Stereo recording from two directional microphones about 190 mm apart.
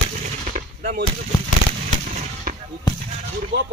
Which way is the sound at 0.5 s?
55° right (ahead or behind).